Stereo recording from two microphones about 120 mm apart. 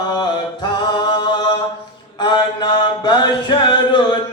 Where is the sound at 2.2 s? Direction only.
40° left (ahead or behind).